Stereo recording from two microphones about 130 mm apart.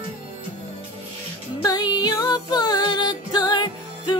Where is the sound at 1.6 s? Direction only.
30° left (ahead or behind).